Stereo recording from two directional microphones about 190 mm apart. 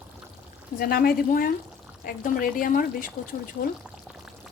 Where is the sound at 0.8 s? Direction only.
55° left (ahead or behind).